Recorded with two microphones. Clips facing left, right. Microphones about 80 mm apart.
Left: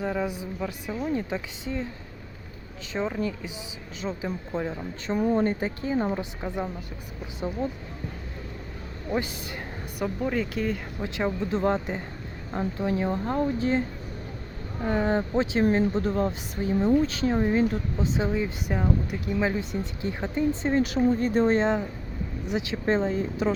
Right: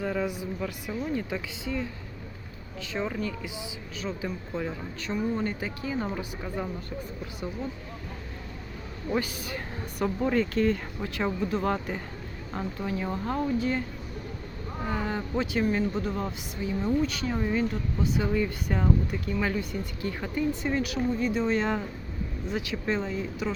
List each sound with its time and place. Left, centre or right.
0.0 s speech: centre
2.9 s speech: left
5.3 s speech: left
6.1 s speech: left
10.2 s speech: centre; by 13.8 s left
14.8 s speech: left
21.6 s speech: left